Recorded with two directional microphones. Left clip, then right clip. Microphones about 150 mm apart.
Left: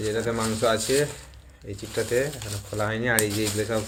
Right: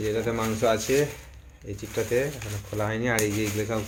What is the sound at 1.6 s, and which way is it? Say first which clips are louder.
Speech: left 1 dB; 5° right (ahead or behind).